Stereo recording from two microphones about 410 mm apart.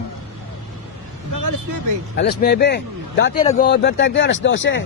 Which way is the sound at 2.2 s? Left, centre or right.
Left.